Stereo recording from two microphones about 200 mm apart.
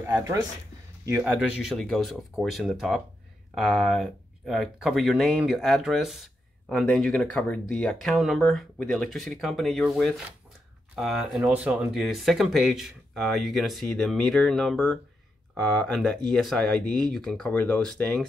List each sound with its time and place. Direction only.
0.0 s speech: 15° right (ahead or behind)
1.6 s speech: centre (ahead or behind)